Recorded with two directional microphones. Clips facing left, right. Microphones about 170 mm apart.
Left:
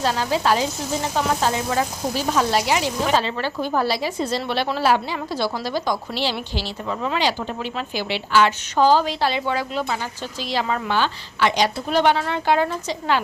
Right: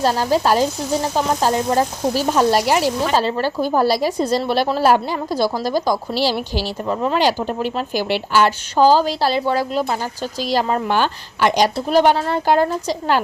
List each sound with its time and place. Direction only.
0.0 s speech: 40° right (ahead or behind)